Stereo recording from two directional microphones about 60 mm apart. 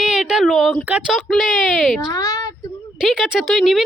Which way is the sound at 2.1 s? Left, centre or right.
Left.